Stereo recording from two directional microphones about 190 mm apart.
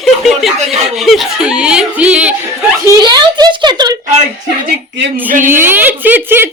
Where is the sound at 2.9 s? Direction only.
20° right (ahead or behind).